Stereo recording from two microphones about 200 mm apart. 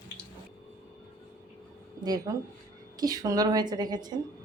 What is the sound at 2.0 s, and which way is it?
A woman's voice, 20° right (ahead or behind).